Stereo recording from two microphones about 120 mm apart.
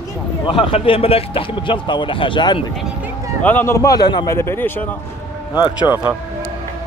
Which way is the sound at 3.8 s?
30° left (ahead or behind).